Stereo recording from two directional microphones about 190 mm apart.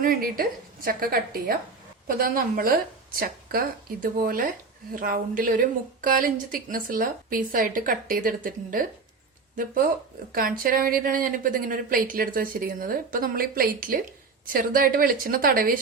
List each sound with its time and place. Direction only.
0.0 s speech: 50° right (ahead or behind)